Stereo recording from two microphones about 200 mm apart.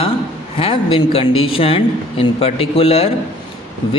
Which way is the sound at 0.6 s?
25° left (ahead or behind).